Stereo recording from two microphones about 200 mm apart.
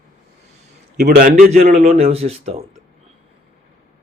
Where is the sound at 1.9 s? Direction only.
30° right (ahead or behind).